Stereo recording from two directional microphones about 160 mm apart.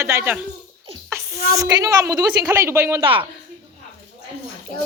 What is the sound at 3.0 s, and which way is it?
Speech, 35° right (ahead or behind).